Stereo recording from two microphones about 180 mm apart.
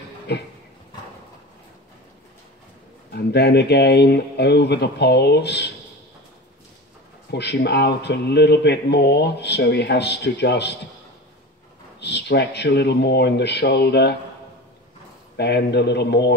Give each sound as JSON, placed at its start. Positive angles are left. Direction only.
{"t": 0.3, "sound": "a man's voice", "side_deg": 70}
{"t": 3.1, "sound": "a man's voice", "side_deg": 65}
{"t": 7.2, "sound": "a man's voice", "side_deg": 65}
{"t": 12.0, "sound": "a man's voice", "side_deg": 65}
{"t": 15.3, "sound": "a man's voice", "side_deg": 65}